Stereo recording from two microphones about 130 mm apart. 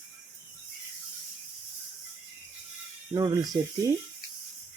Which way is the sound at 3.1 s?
30° right (ahead or behind).